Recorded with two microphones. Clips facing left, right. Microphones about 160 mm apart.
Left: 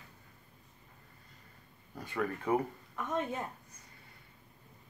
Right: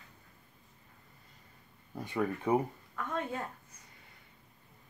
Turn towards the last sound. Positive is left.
turn(degrees=20)  # may be behind; listen again after turning